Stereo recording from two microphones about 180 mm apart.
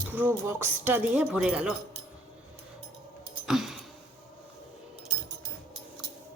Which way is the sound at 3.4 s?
Centre (ahead or behind).